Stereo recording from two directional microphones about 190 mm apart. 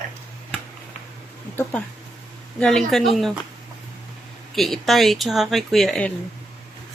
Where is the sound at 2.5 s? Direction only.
5° left (ahead or behind).